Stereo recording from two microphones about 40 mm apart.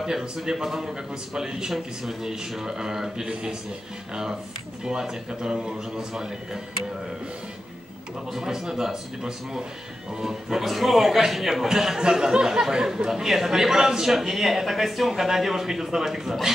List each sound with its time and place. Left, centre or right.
0.0 s a man's voice: centre
8.3 s a man's voice: centre